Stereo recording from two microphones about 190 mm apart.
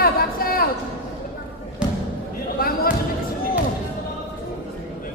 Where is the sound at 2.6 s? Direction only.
50° left (ahead or behind).